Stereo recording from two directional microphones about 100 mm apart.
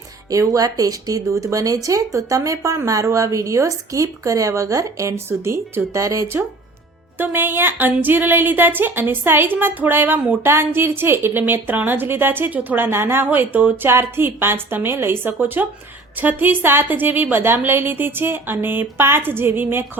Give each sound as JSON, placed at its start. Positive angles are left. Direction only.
{"t": 0.3, "sound": "a woman's voice", "side_deg": -35}